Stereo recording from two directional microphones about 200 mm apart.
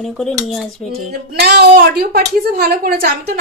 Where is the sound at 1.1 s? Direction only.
50° right (ahead or behind).